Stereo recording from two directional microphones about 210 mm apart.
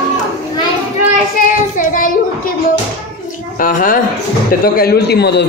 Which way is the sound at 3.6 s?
40° left (ahead or behind).